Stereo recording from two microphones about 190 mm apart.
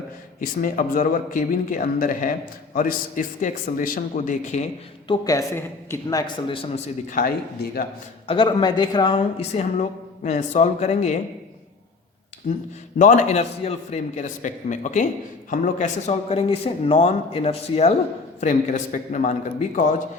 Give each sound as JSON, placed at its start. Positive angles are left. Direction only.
{"t": 0.3, "sound": "speech", "side_deg": 45}
{"t": 5.0, "sound": "a man's voice", "side_deg": 20}
{"t": 7.1, "sound": "speech", "side_deg": 45}
{"t": 8.3, "sound": "a man's voice", "side_deg": 25}
{"t": 13.0, "sound": "speech", "side_deg": 40}